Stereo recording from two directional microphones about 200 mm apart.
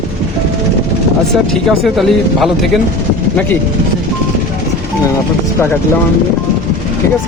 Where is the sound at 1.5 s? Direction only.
Centre (ahead or behind).